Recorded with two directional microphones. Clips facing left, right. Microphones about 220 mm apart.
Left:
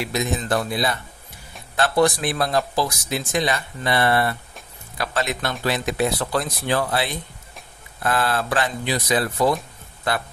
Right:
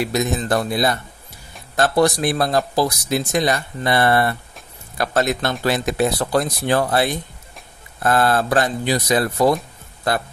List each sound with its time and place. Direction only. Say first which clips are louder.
0.0 s speech: right 4 dB; 40° right (ahead or behind)